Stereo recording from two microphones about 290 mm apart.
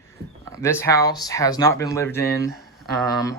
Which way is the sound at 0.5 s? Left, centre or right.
Centre.